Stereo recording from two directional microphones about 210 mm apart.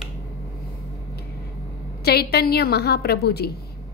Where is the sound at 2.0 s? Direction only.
50° left (ahead or behind).